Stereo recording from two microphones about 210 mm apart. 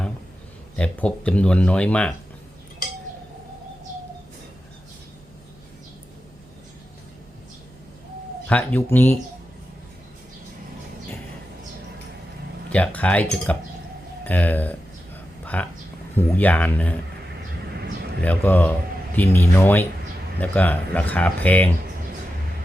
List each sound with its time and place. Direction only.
0.8 s speech: 5° left (ahead or behind)
8.4 s speech: 5° left (ahead or behind)
12.7 s speech: 5° left (ahead or behind)
14.3 s a sound: 10° left (ahead or behind)
16.1 s speech: 10° left (ahead or behind)
17.7 s a sound: 50° right (ahead or behind)
18.2 s speech: 5° left (ahead or behind)